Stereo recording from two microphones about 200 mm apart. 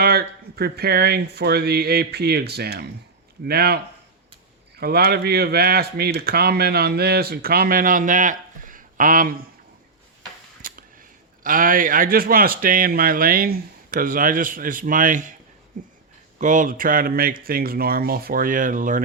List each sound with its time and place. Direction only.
0.0 s speech: 50° right (ahead or behind)
4.8 s speech: 50° right (ahead or behind)
10.6 s speech: 45° right (ahead or behind)